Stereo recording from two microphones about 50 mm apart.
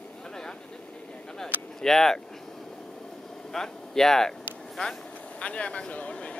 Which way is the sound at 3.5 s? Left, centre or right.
Centre.